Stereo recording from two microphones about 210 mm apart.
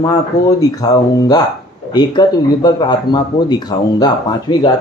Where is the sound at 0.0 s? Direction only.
15° left (ahead or behind).